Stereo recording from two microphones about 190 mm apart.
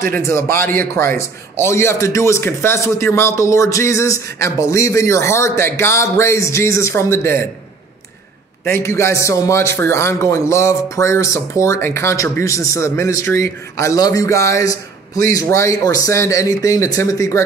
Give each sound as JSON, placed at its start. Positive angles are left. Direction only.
{"t": 0.1, "sound": "a man's voice", "side_deg": 15}
{"t": 8.6, "sound": "a man's voice", "side_deg": 15}